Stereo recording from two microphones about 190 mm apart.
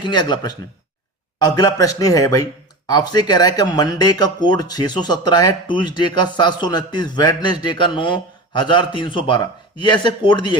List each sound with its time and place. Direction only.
0.0 s speech: 25° left (ahead or behind)